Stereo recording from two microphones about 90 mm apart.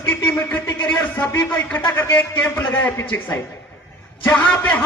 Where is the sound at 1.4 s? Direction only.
20° left (ahead or behind).